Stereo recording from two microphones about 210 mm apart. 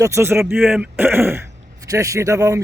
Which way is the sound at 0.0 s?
15° right (ahead or behind).